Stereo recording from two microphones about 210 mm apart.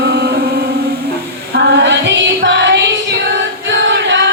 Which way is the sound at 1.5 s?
55° right (ahead or behind).